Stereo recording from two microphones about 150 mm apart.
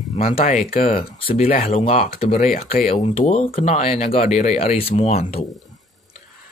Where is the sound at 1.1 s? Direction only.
40° left (ahead or behind).